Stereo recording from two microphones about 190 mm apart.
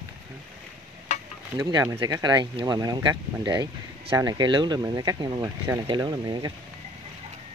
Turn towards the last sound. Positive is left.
turn(degrees=-20)  # may be behind; listen again after turning